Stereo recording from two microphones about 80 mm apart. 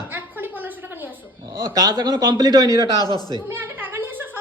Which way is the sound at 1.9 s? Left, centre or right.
Right.